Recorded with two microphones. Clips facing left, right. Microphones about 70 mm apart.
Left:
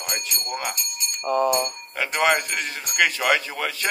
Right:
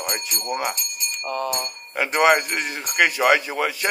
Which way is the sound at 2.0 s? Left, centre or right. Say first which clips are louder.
Right 4 dB; centre.